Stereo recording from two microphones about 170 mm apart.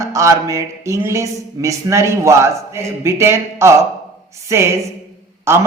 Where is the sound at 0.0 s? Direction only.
20° right (ahead or behind).